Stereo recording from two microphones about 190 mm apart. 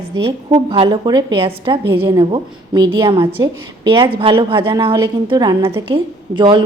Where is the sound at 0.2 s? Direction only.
25° right (ahead or behind).